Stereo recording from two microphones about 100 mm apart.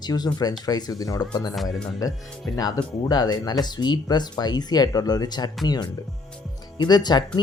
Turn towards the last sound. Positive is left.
turn(degrees=45)  # may be behind; listen again after turning